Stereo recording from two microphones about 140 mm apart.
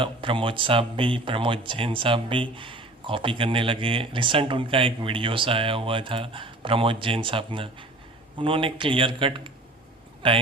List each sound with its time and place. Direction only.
0.0 s speech: 40° right (ahead or behind)